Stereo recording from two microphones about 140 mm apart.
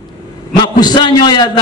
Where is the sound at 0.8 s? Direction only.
30° left (ahead or behind).